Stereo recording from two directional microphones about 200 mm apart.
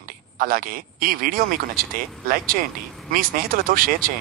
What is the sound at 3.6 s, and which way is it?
Speech, 45° right (ahead or behind).